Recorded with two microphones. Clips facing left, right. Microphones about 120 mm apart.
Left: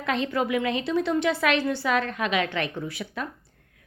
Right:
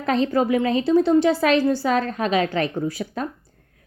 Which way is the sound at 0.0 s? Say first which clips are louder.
Right 6 dB; 35° right (ahead or behind).